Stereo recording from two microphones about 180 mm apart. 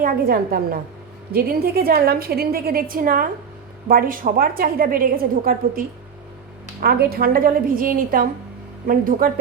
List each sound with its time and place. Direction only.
0.0 s a woman's voice: 55° right (ahead or behind)